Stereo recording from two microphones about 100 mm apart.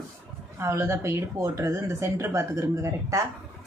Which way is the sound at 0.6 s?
25° right (ahead or behind).